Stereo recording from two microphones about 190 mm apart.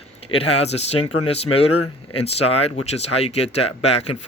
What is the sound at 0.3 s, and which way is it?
Speech, 30° left (ahead or behind).